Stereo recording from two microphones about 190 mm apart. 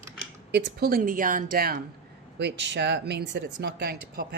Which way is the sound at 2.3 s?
65° right (ahead or behind).